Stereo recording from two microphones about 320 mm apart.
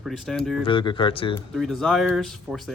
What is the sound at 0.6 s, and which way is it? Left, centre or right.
Speech, centre.